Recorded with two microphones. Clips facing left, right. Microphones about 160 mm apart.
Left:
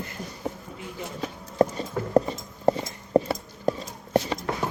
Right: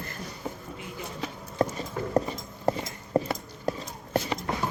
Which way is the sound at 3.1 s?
25° left (ahead or behind).